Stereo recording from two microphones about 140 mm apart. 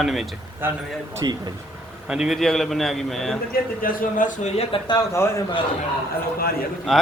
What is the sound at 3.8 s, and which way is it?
Speech, 75° left (ahead or behind).